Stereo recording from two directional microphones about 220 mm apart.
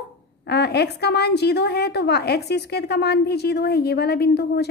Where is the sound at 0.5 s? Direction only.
50° left (ahead or behind).